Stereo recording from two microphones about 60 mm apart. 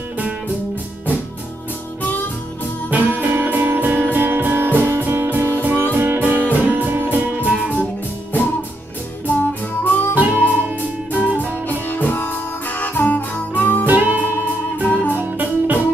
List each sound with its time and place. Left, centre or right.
2.9 s music: right
5.6 s music: right
9.3 s music: left
10.1 s music: right
11.9 s music: left
13.8 s music: right
14.9 s music: left
15.3 s music: right